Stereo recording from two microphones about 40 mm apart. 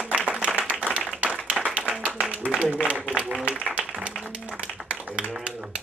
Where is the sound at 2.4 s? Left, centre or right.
Right.